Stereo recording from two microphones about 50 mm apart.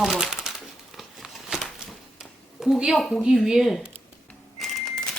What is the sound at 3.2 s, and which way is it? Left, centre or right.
Speech, centre.